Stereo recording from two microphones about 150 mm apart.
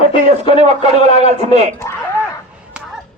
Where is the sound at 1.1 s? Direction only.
45° right (ahead or behind).